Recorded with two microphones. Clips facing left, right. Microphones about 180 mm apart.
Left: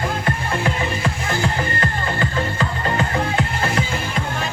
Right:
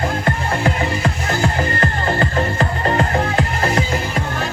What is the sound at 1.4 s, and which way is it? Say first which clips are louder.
Music: right 5 dB; 50° right (ahead or behind).